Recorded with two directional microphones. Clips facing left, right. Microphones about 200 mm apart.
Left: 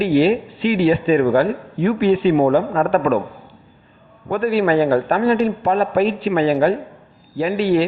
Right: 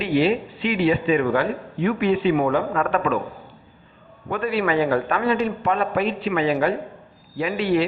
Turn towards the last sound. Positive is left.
turn(degrees=35)  # may be behind; listen again after turning